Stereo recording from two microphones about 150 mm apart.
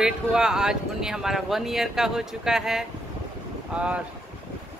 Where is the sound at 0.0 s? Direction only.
5° right (ahead or behind).